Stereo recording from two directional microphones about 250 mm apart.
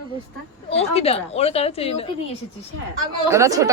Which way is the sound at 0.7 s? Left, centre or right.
Left.